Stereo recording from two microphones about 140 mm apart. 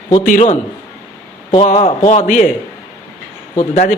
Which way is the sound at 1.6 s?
50° left (ahead or behind).